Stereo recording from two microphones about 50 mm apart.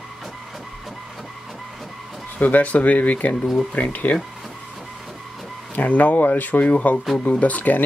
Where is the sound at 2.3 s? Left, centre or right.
Left.